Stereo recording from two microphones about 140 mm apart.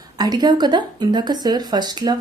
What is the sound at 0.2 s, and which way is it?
A woman's voice, 30° right (ahead or behind).